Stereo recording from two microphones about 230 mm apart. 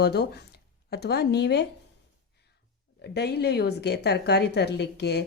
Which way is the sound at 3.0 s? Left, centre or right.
Left.